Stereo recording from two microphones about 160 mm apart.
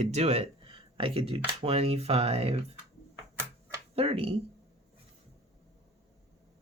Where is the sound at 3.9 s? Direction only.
35° right (ahead or behind).